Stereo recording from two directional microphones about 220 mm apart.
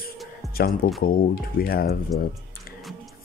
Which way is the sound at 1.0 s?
40° left (ahead or behind).